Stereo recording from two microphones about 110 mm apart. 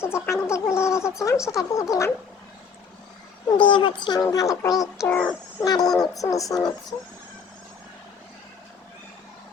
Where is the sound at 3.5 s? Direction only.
50° left (ahead or behind).